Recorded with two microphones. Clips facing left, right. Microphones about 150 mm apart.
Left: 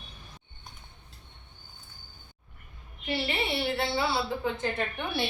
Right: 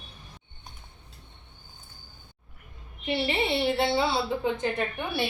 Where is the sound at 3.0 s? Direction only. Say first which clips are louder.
Right 4 dB; 25° right (ahead or behind).